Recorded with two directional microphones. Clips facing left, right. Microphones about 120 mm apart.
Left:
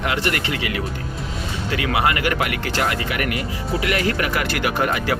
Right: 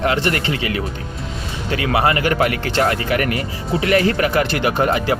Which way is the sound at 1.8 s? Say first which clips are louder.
Right 3 dB; 30° right (ahead or behind).